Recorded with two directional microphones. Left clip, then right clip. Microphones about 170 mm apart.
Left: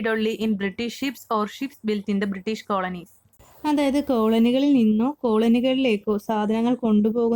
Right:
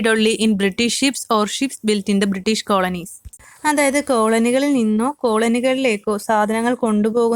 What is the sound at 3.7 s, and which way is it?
Speech, 90° right.